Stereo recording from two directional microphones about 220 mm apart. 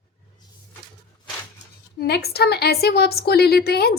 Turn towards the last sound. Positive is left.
turn(degrees=45)  # may be behind; listen again after turning